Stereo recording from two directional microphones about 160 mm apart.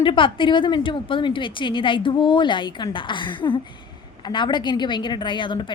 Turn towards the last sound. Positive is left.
turn(degrees=30)  # may be behind; listen again after turning